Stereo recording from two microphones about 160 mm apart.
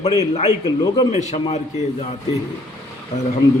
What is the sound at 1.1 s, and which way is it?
Speech, 45° left (ahead or behind).